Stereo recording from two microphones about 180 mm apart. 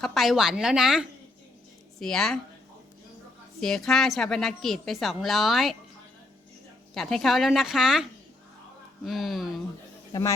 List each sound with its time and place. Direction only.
0.0 s a woman's voice: centre (ahead or behind)
3.6 s a woman's voice: 5° left (ahead or behind)
6.9 s a woman's voice: centre (ahead or behind)
9.0 s a woman's voice: centre (ahead or behind)
10.1 s speech: 20° left (ahead or behind)